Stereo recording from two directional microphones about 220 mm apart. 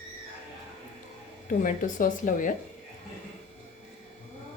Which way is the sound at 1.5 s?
40° left (ahead or behind).